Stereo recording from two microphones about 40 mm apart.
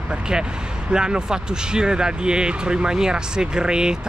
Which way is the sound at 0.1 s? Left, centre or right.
Right.